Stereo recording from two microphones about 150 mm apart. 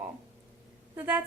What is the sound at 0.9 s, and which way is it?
Speech, 10° right (ahead or behind).